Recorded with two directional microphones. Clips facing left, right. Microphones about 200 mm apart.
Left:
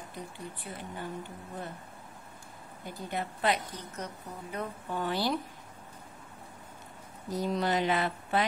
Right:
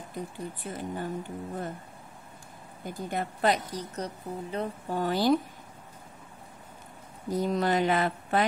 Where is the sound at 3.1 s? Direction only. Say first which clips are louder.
Right 3 dB; 45° right (ahead or behind).